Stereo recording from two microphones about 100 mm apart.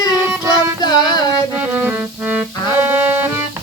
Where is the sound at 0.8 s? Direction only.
45° left (ahead or behind).